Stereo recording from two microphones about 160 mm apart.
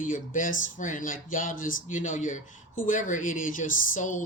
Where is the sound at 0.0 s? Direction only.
55° left (ahead or behind).